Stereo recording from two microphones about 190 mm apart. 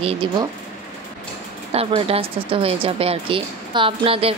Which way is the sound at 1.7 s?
30° right (ahead or behind).